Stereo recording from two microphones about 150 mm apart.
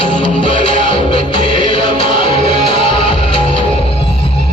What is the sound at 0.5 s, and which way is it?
Music, 60° right (ahead or behind).